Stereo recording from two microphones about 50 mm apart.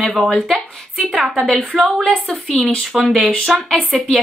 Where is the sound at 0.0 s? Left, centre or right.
Centre.